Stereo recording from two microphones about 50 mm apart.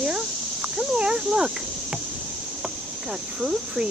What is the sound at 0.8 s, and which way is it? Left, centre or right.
Speech, centre.